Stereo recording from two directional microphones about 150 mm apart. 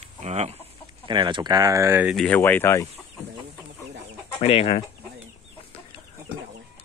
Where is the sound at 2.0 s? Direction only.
5° left (ahead or behind).